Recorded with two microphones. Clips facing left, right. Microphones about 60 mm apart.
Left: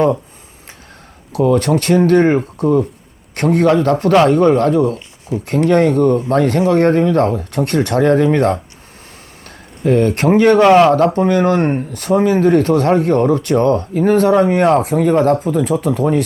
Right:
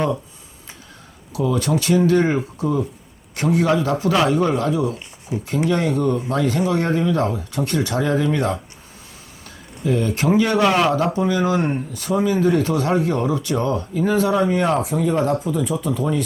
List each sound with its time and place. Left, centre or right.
1.3 s speech: left
9.8 s speech: left